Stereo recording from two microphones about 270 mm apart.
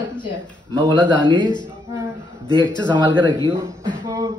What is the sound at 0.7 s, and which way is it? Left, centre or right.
Speech, centre.